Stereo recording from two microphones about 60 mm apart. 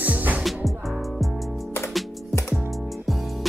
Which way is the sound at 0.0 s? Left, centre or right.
Right.